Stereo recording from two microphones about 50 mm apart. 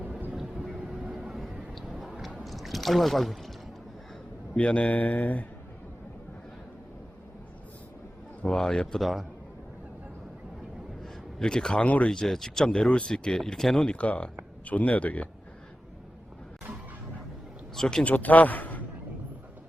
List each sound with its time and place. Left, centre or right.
0.8 s vehicle: centre
2.4 s a sound: centre
4.5 s speech: left
8.4 s speech: centre
9.0 s a man's voice: centre
11.0 s a man's voice: centre
12.1 s speech: centre
13.8 s speech: left
17.7 s speech: centre
18.0 s a man's voice: left